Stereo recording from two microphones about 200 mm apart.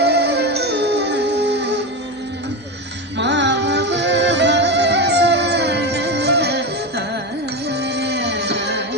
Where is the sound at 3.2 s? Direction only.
60° right (ahead or behind).